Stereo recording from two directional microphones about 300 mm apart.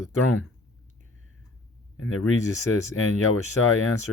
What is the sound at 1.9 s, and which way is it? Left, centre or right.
Speech, left.